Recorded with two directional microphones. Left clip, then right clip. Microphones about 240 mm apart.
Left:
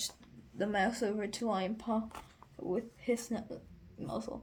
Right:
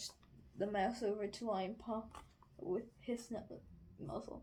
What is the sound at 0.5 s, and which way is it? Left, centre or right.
Speech, left.